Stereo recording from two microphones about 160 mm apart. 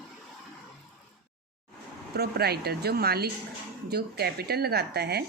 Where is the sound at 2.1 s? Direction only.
90° right.